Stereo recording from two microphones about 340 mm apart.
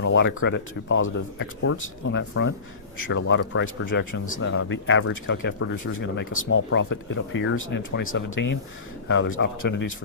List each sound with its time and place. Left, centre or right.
0.0 s speech: left